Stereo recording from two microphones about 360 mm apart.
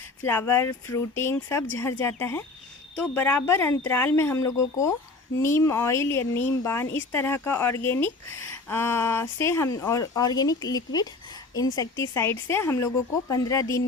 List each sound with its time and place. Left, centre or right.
0.3 s speech: centre